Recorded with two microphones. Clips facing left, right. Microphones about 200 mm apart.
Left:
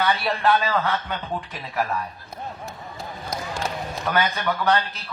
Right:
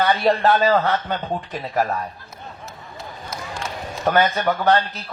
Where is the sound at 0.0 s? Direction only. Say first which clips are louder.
Right 5 dB; 40° right (ahead or behind).